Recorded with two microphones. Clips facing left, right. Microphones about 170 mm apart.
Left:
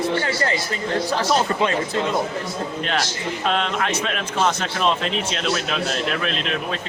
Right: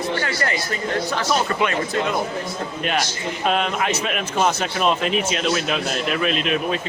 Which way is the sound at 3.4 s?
5° right (ahead or behind).